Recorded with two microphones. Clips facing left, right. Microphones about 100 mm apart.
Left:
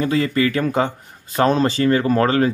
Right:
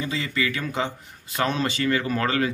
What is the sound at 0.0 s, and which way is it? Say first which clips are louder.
Speech: left 9 dB; 50° left (ahead or behind).